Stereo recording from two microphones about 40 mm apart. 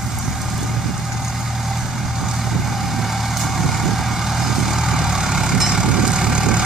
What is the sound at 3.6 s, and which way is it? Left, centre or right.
Vehicle, centre.